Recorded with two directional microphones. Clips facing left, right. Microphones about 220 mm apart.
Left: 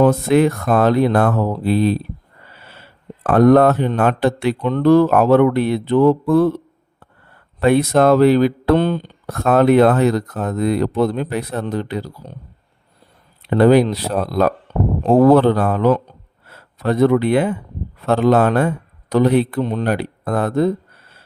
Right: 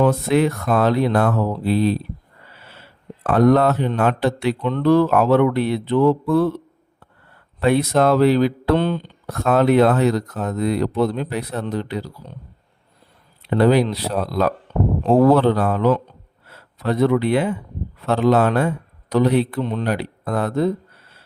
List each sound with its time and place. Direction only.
0.0 s speech: 45° left (ahead or behind)
3.2 s speech: 50° left (ahead or behind)
7.6 s speech: 50° left (ahead or behind)
13.5 s speech: 50° left (ahead or behind)